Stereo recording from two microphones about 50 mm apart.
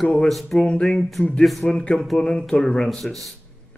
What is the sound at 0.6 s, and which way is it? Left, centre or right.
Speech, centre.